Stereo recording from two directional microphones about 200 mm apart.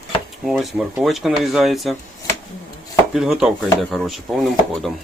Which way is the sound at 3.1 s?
Centre (ahead or behind).